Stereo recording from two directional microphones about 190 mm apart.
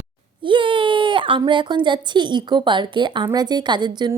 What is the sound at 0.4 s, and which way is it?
Speech, 25° right (ahead or behind).